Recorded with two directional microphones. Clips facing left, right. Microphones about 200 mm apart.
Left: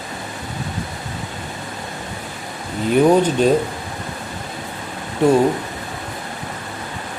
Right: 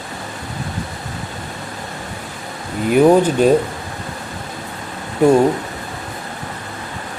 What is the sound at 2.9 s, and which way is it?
Speech, 10° right (ahead or behind).